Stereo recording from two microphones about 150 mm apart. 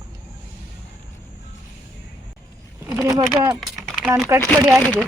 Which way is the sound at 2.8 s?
20° right (ahead or behind).